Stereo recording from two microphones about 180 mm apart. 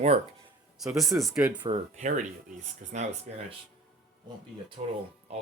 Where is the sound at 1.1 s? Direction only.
Centre (ahead or behind).